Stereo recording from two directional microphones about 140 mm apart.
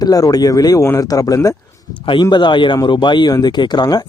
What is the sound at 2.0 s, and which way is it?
Speech, 35° left (ahead or behind).